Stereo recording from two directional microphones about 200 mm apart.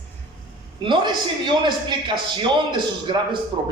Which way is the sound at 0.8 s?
25° right (ahead or behind).